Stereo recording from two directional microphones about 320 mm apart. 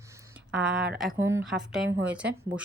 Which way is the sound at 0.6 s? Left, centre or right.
Centre.